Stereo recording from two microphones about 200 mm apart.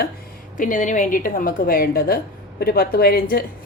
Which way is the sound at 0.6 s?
40° left (ahead or behind).